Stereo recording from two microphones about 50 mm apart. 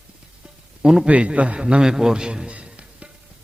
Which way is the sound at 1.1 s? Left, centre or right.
Right.